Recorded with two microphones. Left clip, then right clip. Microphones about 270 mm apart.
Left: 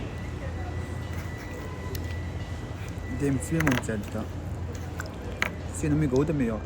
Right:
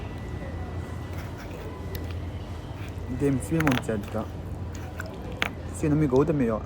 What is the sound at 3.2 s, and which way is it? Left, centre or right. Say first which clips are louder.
Speech: right 2 dB; centre.